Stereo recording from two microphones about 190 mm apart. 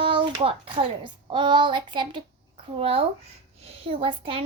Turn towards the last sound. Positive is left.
turn(degrees=-30)  # may be behind; listen again after turning